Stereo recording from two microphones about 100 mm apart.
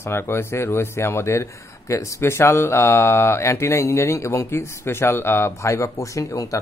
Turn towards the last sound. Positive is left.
turn(degrees=35)  # may be behind; listen again after turning